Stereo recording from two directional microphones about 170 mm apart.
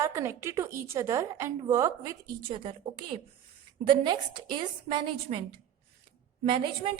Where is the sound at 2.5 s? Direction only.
30° right (ahead or behind).